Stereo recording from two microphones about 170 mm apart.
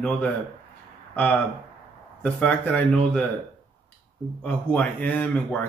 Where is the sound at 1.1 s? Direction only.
10° left (ahead or behind).